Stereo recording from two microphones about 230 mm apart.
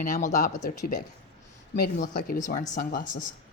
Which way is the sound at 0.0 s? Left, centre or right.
Left.